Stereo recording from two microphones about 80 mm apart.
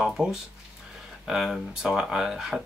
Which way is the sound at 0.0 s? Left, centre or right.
Centre.